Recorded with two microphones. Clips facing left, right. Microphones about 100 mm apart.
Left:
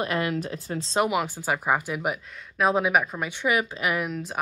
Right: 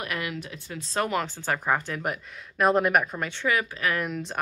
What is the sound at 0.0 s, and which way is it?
Speech, 30° left (ahead or behind).